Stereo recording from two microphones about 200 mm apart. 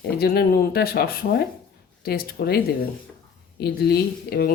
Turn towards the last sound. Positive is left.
turn(degrees=50)  # may be behind; listen again after turning